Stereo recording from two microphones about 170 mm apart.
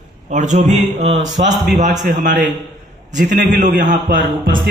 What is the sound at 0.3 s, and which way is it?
Speech, 45° right (ahead or behind).